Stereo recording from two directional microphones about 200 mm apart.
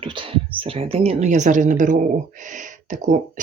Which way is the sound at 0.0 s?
25° right (ahead or behind).